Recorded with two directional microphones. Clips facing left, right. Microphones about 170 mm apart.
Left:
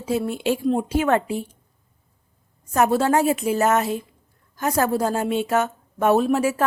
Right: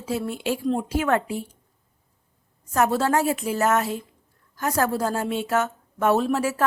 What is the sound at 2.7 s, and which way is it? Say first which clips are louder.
Speech: left 3 dB; 15° left (ahead or behind).